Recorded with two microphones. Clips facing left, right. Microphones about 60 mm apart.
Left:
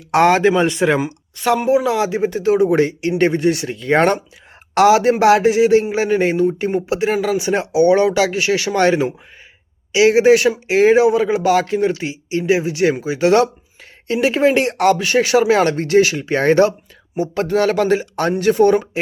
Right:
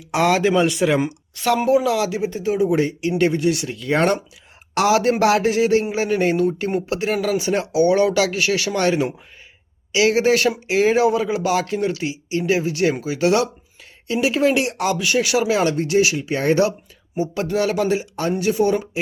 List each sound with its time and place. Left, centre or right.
0.6 s speech: left
0.9 s speech: centre
1.7 s speech: left
2.3 s speech: left
3.1 s speech: left
17.3 s a sound: left